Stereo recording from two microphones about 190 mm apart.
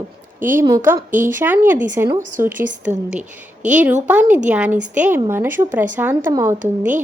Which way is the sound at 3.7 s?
10° right (ahead or behind).